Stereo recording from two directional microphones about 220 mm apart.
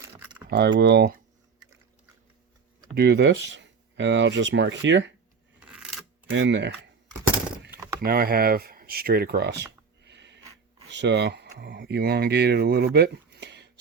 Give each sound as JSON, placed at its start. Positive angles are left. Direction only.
{"t": 0.0, "sound": "keys jangling", "side_deg": -15}
{"t": 0.4, "sound": "speech", "side_deg": -50}
{"t": 2.9, "sound": "speech", "side_deg": -50}
{"t": 5.5, "sound": "coin", "side_deg": -5}
{"t": 6.3, "sound": "speech", "side_deg": -55}
{"t": 8.0, "sound": "speech", "side_deg": -45}
{"t": 10.0, "sound": "a sound", "side_deg": -50}
{"t": 10.8, "sound": "speech", "side_deg": -50}